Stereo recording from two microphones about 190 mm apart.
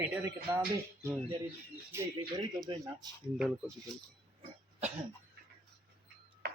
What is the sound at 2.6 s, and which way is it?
Speech, 20° right (ahead or behind).